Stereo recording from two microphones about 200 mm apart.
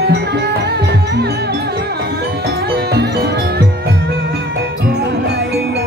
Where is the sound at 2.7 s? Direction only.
55° right (ahead or behind).